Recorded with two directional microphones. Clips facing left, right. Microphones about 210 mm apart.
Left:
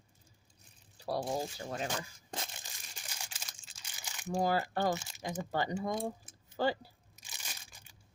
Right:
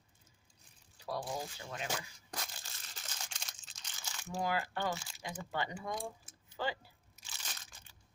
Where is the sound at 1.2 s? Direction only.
30° left (ahead or behind).